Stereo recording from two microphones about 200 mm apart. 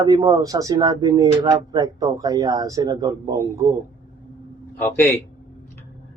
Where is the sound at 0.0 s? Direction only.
20° right (ahead or behind).